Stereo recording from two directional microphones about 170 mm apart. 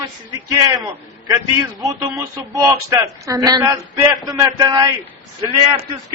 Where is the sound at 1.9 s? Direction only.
20° right (ahead or behind).